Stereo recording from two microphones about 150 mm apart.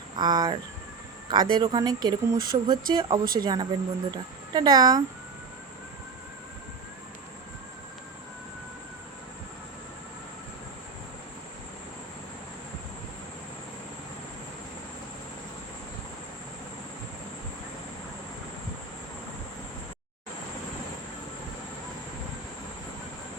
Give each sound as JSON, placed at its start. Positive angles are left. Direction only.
{"t": 0.2, "sound": "speech", "side_deg": -25}